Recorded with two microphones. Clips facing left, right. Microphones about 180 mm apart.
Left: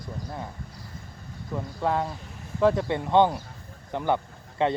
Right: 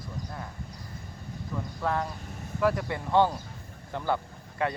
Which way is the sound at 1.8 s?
20° left (ahead or behind).